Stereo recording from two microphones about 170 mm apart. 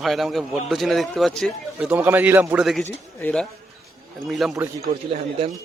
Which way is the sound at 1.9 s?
10° right (ahead or behind).